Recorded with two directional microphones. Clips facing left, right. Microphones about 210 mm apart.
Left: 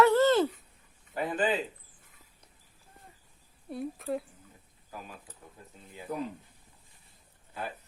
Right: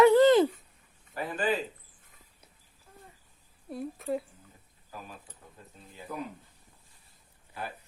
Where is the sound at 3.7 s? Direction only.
Centre (ahead or behind).